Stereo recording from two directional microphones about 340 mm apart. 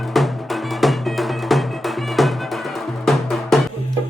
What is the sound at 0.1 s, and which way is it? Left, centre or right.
Music, centre.